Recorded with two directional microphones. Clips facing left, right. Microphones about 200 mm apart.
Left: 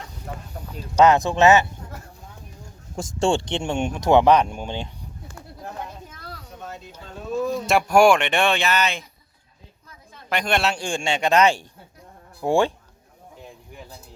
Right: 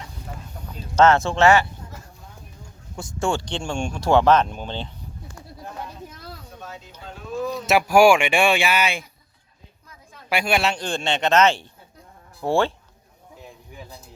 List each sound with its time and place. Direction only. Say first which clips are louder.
0.9 s a man's voice: left 1 dB; 15° left (ahead or behind)
3.2 s speech: left 3 dB; 25° left (ahead or behind)
7.4 s speech: right 1 dB; centre (ahead or behind)
10.2 s a man's voice: right 1 dB; 5° right (ahead or behind); by 12.7 s 15° left (ahead or behind)